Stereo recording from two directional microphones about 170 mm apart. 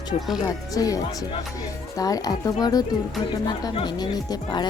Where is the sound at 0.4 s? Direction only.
20° left (ahead or behind).